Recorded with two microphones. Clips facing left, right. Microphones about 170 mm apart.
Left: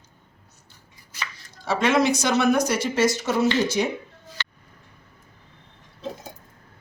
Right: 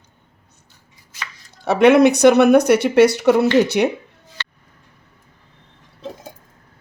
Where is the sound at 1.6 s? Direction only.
65° right (ahead or behind).